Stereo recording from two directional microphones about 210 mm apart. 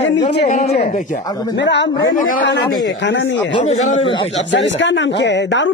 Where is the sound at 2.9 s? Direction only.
60° left (ahead or behind).